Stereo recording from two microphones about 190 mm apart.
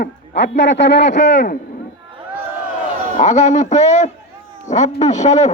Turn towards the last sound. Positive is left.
turn(degrees=40)  # may be behind; listen again after turning